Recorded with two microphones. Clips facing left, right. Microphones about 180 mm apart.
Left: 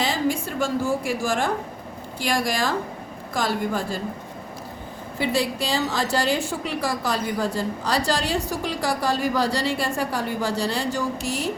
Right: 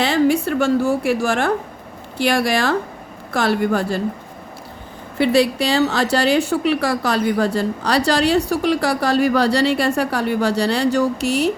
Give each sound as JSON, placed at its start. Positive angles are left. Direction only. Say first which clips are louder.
{"t": 0.0, "sound": "a woman's voice", "louder": "right 7 dB", "side_deg": -70}
{"t": 5.1, "sound": "a woman's voice", "louder": "right 8 dB", "side_deg": -70}